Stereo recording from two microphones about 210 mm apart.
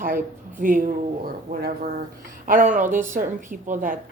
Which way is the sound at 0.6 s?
40° right (ahead or behind).